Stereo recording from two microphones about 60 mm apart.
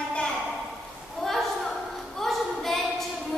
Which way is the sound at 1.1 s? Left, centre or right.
Centre.